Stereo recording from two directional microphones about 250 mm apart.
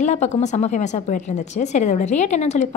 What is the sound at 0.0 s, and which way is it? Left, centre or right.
A woman's voice, left.